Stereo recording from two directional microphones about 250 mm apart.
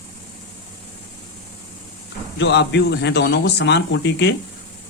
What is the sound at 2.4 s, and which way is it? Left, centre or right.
Speech, left.